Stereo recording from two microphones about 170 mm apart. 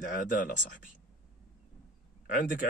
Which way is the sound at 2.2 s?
55° left (ahead or behind).